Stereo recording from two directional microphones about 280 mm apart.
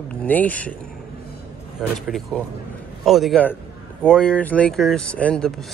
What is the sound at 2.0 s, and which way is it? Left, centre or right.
Speech, centre.